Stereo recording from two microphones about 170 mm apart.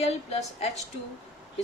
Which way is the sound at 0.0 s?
35° left (ahead or behind).